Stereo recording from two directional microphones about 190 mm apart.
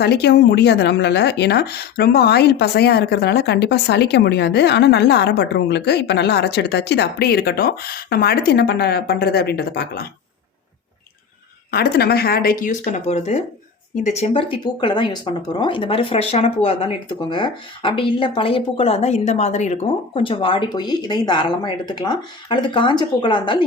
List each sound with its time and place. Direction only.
0.0 s speech: 60° left (ahead or behind)
11.7 s speech: 55° left (ahead or behind); by 23.6 s 25° left (ahead or behind)